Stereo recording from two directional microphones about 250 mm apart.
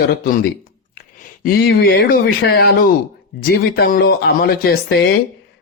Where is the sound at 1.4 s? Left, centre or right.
Left.